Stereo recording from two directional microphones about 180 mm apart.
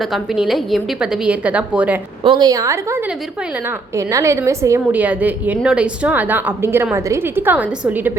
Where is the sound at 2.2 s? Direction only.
25° right (ahead or behind).